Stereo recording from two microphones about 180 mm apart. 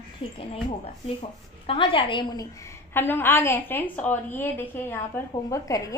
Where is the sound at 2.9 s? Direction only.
10° left (ahead or behind).